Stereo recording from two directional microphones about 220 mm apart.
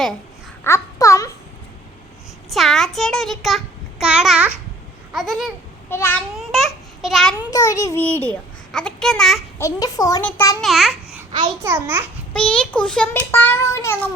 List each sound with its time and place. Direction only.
0.6 s babbling: 15° left (ahead or behind)
2.5 s a child's voice: centre (ahead or behind)
7.5 s a child's voice: 15° left (ahead or behind)
9.6 s a child's voice: 15° left (ahead or behind)
10.6 s a child's voice: centre (ahead or behind)
11.3 s a child's voice: 20° right (ahead or behind)
12.3 s a child's voice: 5° left (ahead or behind)